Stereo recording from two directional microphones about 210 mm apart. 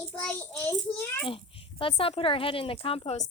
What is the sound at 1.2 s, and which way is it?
A woman's voice, 25° left (ahead or behind).